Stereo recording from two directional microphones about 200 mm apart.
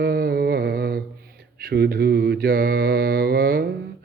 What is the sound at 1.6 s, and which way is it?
Mantra, 50° right (ahead or behind).